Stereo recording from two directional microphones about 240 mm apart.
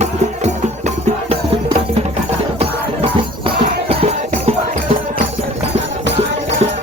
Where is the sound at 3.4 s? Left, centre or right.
Right.